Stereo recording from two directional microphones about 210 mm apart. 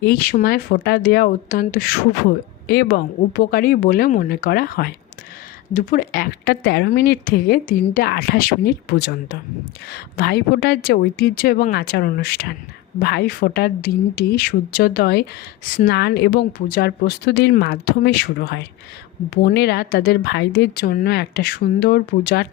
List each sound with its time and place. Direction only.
0.0 s speech: 45° left (ahead or behind)